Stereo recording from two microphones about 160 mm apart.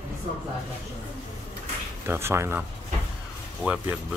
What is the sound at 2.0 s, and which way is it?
Speech, 15° right (ahead or behind).